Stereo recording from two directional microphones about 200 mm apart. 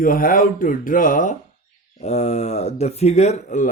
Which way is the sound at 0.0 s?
45° left (ahead or behind).